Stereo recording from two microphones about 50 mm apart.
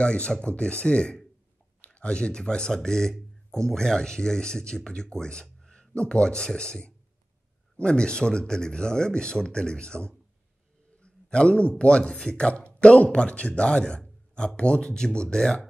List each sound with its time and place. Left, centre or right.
0.0 s speech: left
11.0 s a sound: centre
11.8 s speech: centre